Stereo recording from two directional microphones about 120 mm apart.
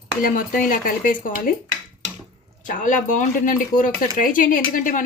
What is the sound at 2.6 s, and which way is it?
Speech, 90° left.